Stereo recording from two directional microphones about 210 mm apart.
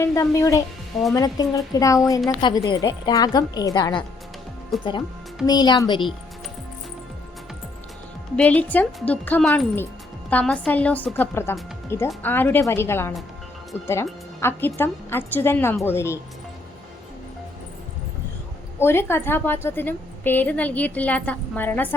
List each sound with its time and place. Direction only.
0.0 s speech: 15° left (ahead or behind)
4.7 s speech: centre (ahead or behind)
5.5 s speech: 20° left (ahead or behind)
8.4 s speech: 5° left (ahead or behind)
18.8 s speech: 10° left (ahead or behind)